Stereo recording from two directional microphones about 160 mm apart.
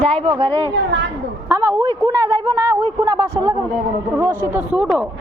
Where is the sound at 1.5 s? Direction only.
15° right (ahead or behind).